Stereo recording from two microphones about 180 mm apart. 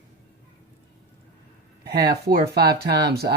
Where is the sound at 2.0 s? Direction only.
60° right (ahead or behind).